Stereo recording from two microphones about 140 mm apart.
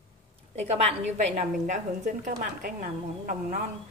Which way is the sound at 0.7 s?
50° right (ahead or behind).